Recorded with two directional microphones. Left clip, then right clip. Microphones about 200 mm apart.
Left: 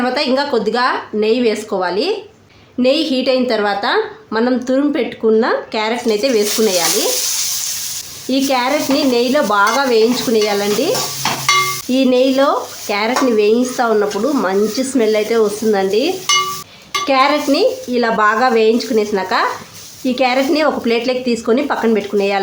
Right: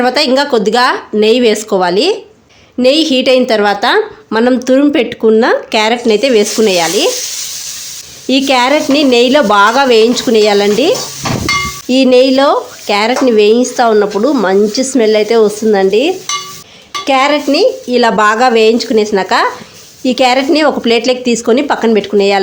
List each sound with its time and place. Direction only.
0.0 s speech: 35° right (ahead or behind)
8.3 s speech: 35° right (ahead or behind)